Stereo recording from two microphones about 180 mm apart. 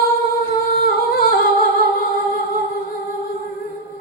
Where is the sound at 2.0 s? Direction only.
50° left (ahead or behind).